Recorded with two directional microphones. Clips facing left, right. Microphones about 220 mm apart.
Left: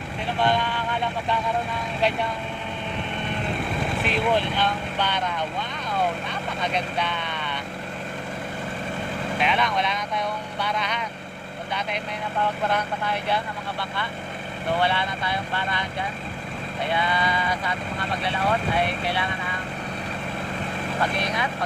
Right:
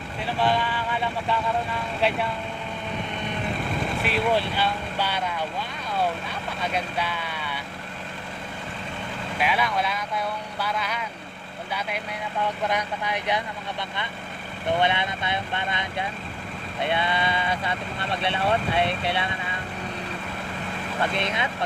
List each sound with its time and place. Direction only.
0.3 s vehicle: 5° right (ahead or behind)
4.0 s speech: 5° right (ahead or behind)
6.7 s speech: 5° right (ahead or behind)
9.4 s speech: 5° right (ahead or behind); by 19.3 s 25° right (ahead or behind)
21.1 s speech: 25° right (ahead or behind)